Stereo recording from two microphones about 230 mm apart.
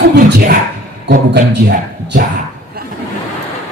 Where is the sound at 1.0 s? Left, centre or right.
Right.